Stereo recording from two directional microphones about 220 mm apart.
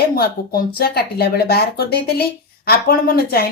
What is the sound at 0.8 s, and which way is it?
A woman's voice, 45° left (ahead or behind).